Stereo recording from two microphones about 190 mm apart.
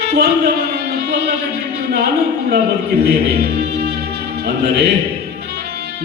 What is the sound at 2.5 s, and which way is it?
Speech, 60° right (ahead or behind).